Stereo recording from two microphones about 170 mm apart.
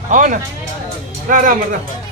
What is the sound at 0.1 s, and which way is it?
Speech, 50° right (ahead or behind).